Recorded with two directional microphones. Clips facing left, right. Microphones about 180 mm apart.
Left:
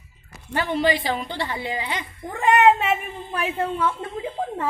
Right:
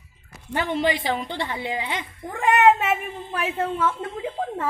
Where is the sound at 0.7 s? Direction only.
20° right (ahead or behind).